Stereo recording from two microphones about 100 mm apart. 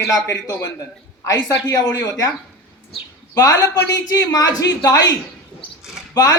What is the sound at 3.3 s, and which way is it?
A man's voice, 35° left (ahead or behind).